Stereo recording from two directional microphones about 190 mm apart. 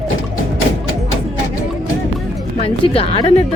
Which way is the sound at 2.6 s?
30° left (ahead or behind).